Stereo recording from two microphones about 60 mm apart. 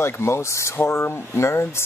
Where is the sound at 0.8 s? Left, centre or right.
Left.